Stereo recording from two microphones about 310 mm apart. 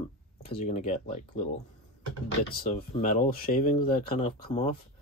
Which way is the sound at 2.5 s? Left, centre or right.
Left.